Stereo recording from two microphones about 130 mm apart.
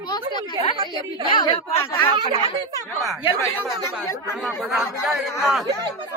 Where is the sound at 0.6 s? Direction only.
40° left (ahead or behind).